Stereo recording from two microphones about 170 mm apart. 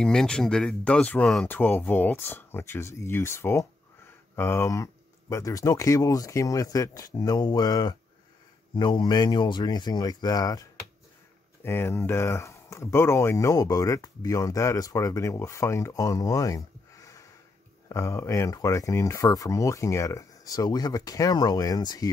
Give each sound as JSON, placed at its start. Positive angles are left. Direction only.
{"t": 0.0, "sound": "speech", "side_deg": 5}